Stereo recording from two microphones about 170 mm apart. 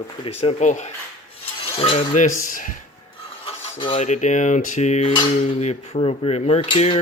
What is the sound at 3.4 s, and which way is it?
Filing, 35° left (ahead or behind).